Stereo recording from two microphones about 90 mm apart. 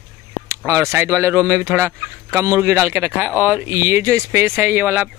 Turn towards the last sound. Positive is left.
turn(degrees=-20)  # may be behind; listen again after turning